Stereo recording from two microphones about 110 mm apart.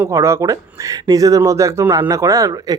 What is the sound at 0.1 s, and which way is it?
Speech, 25° right (ahead or behind).